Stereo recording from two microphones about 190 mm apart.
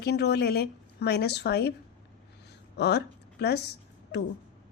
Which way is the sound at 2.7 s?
60° left (ahead or behind).